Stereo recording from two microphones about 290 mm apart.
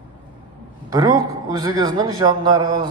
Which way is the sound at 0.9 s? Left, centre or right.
Centre.